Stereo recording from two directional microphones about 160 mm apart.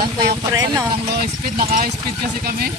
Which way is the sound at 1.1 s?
65° right (ahead or behind).